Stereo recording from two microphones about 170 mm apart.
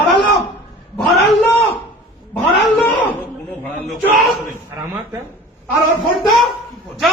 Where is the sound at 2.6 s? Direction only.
10° left (ahead or behind).